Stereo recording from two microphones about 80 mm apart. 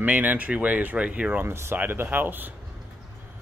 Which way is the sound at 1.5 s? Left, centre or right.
Right.